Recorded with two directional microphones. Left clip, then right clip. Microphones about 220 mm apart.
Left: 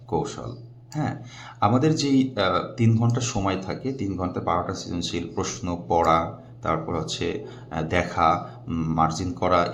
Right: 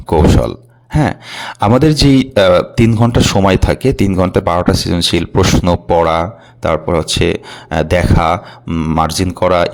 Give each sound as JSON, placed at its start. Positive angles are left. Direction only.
{"t": 0.9, "sound": "speech", "side_deg": -45}